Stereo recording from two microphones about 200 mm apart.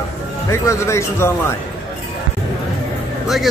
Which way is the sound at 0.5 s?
15° left (ahead or behind).